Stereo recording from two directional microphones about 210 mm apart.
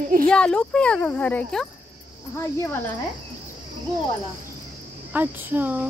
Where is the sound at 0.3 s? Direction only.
5° left (ahead or behind).